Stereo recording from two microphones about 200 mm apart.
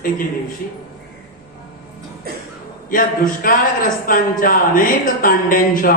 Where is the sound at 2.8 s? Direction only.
45° left (ahead or behind).